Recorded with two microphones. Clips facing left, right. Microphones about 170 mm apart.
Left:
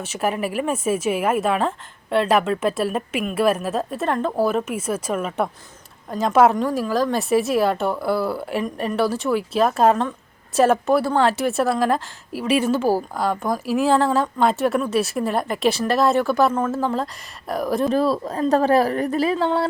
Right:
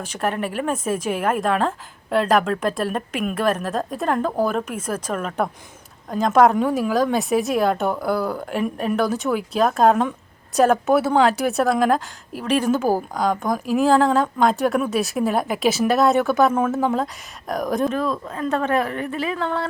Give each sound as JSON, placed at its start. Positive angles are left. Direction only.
{"t": 0.0, "sound": "a woman's voice", "side_deg": 5}
{"t": 17.9, "sound": "a woman's voice", "side_deg": 35}